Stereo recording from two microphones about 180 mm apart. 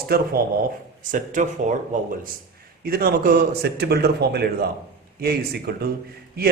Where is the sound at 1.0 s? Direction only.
45° right (ahead or behind).